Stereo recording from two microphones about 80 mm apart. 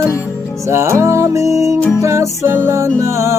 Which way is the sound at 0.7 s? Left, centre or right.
Right.